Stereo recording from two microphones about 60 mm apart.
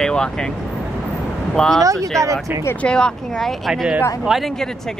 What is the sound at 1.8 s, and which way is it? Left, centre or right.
Speech, right.